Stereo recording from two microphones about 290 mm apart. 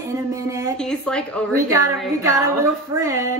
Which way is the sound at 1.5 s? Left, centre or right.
Centre.